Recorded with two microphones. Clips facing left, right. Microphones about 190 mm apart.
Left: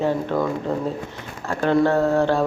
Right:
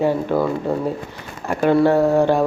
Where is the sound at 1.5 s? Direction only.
10° right (ahead or behind).